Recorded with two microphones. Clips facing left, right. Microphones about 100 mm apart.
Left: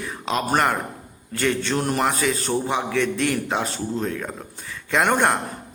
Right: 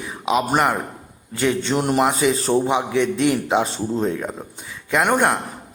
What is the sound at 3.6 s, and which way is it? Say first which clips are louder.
Speech: right 4 dB; 30° right (ahead or behind).